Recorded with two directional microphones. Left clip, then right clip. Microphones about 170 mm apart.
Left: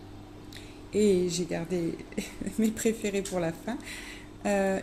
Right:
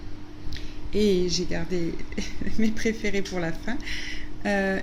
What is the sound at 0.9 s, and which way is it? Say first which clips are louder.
A woman's voice: right 2 dB; 5° left (ahead or behind).